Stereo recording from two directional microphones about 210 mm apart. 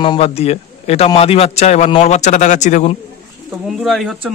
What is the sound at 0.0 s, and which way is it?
A man's voice, 25° left (ahead or behind).